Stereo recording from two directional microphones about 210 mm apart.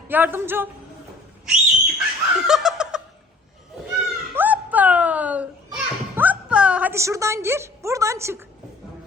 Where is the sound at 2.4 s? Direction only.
Centre (ahead or behind).